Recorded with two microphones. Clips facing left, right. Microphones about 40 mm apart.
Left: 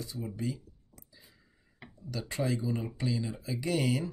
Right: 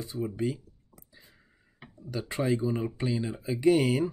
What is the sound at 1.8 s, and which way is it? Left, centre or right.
Speech, right.